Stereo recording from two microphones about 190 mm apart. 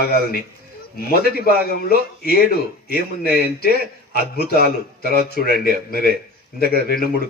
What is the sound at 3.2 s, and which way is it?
Speech, 55° right (ahead or behind).